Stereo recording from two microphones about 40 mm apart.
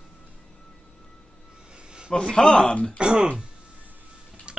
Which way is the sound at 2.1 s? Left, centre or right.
Centre.